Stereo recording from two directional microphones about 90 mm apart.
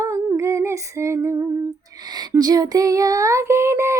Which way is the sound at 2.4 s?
45° right (ahead or behind).